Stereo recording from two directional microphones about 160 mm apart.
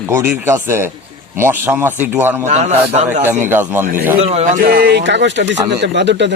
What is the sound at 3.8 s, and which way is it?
Speech, 55° right (ahead or behind).